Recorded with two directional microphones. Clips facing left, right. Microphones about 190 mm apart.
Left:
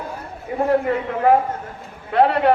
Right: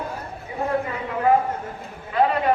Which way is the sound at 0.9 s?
65° left (ahead or behind).